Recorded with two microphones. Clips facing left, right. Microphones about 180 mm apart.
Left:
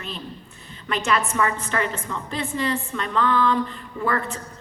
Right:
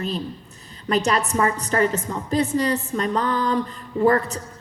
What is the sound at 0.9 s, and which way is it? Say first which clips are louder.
A woman's voice: right 3 dB; 40° right (ahead or behind).